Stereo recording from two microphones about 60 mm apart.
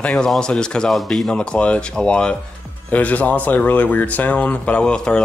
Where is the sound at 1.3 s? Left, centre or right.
Centre.